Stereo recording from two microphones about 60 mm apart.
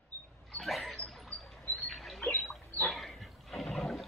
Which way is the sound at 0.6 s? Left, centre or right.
Centre.